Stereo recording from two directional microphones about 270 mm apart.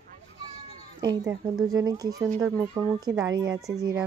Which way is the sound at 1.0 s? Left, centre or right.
Centre.